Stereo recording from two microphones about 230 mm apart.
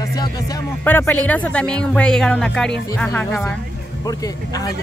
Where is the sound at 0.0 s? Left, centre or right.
Centre.